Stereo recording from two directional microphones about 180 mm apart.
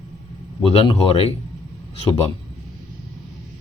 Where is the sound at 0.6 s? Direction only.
30° left (ahead or behind).